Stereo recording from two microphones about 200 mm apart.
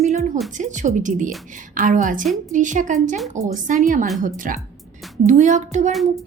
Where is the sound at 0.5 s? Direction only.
40° right (ahead or behind).